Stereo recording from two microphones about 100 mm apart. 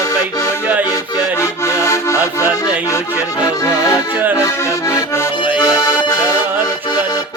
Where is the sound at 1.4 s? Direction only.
30° left (ahead or behind).